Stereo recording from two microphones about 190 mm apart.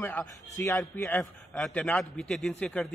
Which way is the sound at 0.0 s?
10° left (ahead or behind).